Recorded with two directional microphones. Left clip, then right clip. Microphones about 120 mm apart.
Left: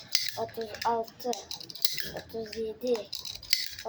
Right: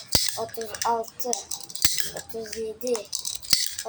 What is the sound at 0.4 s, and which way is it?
Speech, 15° left (ahead or behind).